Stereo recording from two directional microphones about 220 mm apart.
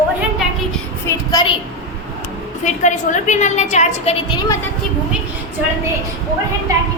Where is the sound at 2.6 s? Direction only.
35° left (ahead or behind).